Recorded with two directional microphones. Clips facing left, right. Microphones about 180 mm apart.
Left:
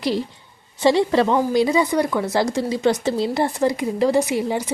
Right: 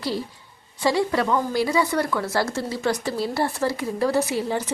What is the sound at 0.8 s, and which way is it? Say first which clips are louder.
Speech: left 5 dB; 25° left (ahead or behind).